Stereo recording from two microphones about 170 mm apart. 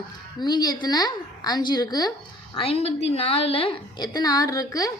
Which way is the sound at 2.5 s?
35° left (ahead or behind).